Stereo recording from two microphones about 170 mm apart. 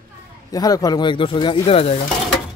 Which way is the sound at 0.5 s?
20° left (ahead or behind).